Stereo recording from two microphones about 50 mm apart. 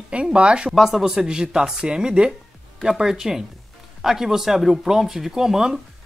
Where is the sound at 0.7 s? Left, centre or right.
Centre.